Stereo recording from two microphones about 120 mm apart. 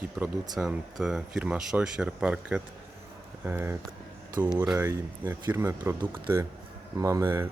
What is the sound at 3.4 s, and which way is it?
Speech, 20° right (ahead or behind).